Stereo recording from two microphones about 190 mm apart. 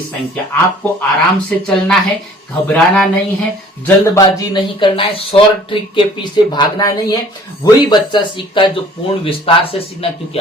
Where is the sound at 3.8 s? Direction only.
20° left (ahead or behind).